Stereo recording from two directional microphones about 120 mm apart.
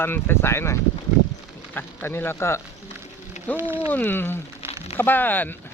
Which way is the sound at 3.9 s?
15° left (ahead or behind).